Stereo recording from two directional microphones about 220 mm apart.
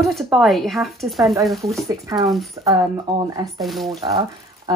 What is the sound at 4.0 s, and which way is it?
Speech, 20° right (ahead or behind).